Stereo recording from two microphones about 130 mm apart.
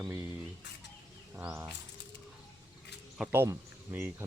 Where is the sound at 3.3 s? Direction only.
20° right (ahead or behind).